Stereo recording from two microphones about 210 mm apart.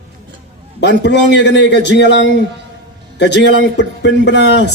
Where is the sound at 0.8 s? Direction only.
55° left (ahead or behind).